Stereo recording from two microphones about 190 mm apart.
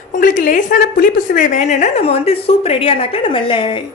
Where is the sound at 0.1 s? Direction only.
45° left (ahead or behind).